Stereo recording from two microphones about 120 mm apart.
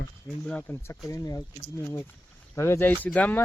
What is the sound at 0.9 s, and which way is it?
Speech, 25° left (ahead or behind).